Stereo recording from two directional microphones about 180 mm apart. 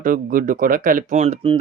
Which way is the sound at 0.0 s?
50° right (ahead or behind).